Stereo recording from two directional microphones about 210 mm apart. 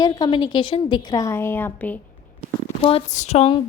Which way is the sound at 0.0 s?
20° left (ahead or behind).